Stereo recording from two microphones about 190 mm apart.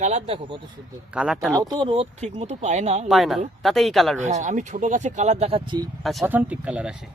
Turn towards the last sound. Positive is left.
turn(degrees=-5)  # may be behind; listen again after turning